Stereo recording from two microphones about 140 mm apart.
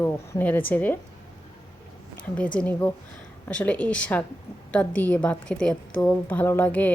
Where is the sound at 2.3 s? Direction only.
10° left (ahead or behind).